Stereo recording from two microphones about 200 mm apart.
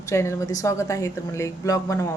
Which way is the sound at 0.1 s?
15° left (ahead or behind).